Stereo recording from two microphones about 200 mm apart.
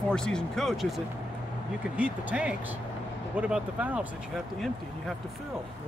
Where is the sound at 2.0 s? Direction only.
5° right (ahead or behind).